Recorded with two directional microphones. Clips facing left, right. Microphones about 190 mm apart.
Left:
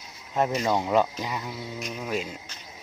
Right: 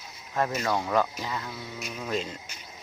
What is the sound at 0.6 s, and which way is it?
Speech, 20° left (ahead or behind).